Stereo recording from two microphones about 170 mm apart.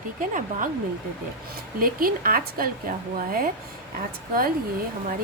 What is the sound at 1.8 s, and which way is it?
A woman's voice, 55° right (ahead or behind).